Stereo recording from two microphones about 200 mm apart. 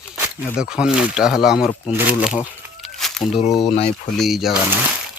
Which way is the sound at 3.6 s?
35° left (ahead or behind).